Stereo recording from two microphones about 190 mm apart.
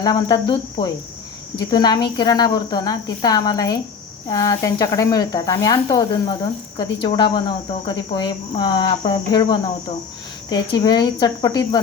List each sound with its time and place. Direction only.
0.0 s speech: 20° left (ahead or behind)